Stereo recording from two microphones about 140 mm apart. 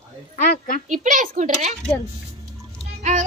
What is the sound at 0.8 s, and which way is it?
Speech, 65° right (ahead or behind).